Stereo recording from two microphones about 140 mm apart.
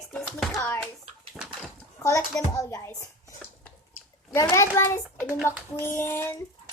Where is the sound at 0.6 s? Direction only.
15° left (ahead or behind).